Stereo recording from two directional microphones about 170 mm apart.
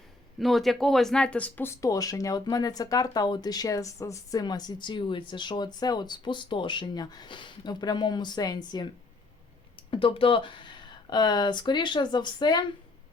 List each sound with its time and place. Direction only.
0.3 s speech: centre (ahead or behind); by 8.9 s 25° left (ahead or behind)
9.9 s speech: 30° left (ahead or behind)